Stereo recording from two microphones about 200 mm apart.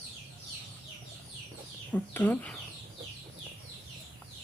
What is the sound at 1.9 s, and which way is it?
Speech, 10° left (ahead or behind).